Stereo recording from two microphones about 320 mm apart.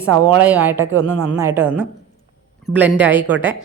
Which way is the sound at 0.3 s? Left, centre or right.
Centre.